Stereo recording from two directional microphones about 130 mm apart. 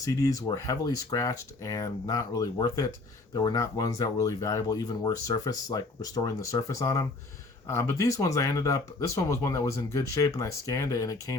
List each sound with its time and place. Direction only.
0.0 s speech: 25° left (ahead or behind)